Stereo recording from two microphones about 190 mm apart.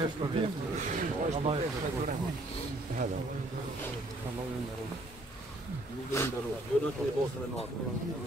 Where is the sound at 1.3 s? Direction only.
30° right (ahead or behind).